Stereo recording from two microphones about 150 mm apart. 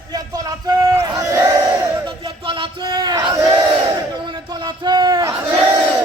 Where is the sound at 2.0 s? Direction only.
35° right (ahead or behind).